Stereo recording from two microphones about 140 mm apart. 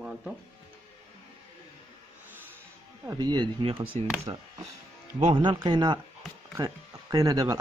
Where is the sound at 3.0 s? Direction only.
25° right (ahead or behind).